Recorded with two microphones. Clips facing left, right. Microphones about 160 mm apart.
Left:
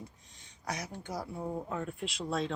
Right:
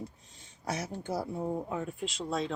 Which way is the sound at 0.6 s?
30° right (ahead or behind).